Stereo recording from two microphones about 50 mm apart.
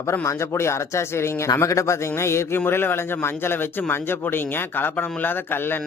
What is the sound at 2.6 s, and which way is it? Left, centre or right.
A man's voice, left.